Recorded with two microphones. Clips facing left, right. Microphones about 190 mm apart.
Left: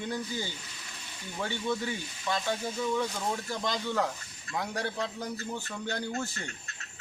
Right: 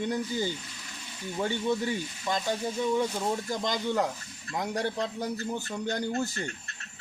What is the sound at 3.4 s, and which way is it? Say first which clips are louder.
Speech: right 3 dB; 20° right (ahead or behind).